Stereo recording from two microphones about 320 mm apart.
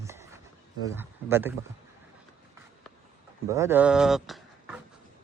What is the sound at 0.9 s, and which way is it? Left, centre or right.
Speech, centre.